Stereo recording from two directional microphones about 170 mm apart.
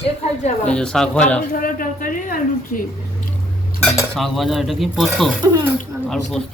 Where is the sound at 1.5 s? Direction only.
55° left (ahead or behind).